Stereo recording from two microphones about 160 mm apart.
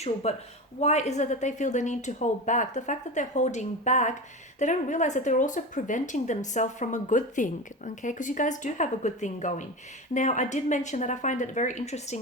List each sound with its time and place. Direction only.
0.0 s speech: 40° left (ahead or behind)